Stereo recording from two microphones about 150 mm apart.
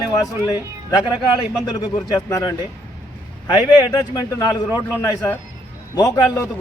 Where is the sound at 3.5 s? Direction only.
25° left (ahead or behind).